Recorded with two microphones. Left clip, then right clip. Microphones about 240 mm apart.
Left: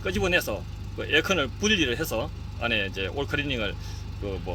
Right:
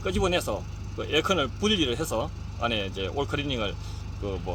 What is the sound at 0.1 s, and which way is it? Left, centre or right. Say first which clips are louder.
Speech: left 2 dB; centre.